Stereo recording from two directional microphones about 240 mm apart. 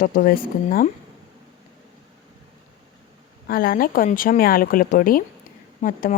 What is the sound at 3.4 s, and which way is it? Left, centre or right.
A woman's voice, left.